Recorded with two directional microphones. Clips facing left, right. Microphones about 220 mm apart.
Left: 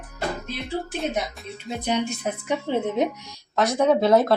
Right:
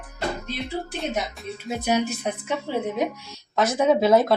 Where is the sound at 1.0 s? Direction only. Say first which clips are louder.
Left 1 dB; centre (ahead or behind).